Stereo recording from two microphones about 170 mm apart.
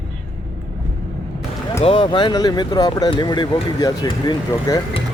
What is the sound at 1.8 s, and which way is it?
Speech, 30° left (ahead or behind).